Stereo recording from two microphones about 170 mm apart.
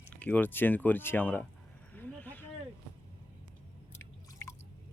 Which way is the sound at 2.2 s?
10° left (ahead or behind).